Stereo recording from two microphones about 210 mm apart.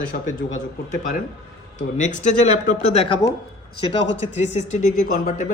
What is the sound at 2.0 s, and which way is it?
Speech, 35° left (ahead or behind).